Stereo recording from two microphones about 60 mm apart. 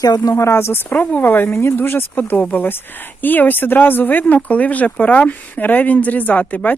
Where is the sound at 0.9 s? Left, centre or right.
Left.